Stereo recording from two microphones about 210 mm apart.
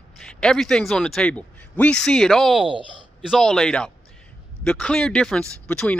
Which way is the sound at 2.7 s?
25° right (ahead or behind).